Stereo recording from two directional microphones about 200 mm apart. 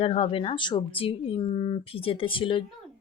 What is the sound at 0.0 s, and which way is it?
Speech, 30° left (ahead or behind).